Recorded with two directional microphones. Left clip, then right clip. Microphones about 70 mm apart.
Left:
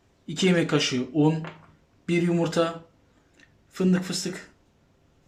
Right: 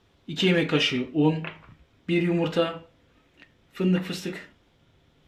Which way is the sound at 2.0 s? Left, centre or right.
Left.